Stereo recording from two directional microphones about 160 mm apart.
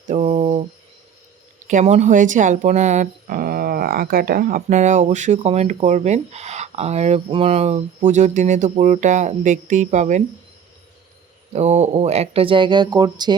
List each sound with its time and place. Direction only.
0.1 s mantra: 45° right (ahead or behind)
1.6 s speech: 45° right (ahead or behind)
11.5 s speech: 45° right (ahead or behind); by 13.3 s 25° right (ahead or behind)